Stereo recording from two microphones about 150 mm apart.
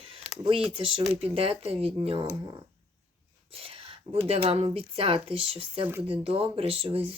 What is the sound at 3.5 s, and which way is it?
Speech, 40° right (ahead or behind).